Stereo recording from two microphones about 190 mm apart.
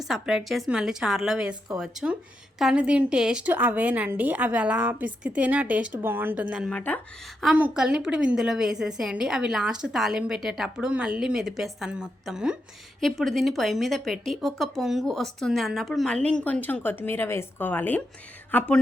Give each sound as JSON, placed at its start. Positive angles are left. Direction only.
{"t": 0.0, "sound": "a woman's voice", "side_deg": 0}
{"t": 6.7, "sound": "speech", "side_deg": 5}
{"t": 7.4, "sound": "a woman's voice", "side_deg": -5}